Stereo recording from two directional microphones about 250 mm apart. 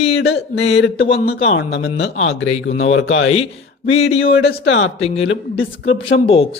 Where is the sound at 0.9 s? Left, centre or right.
Left.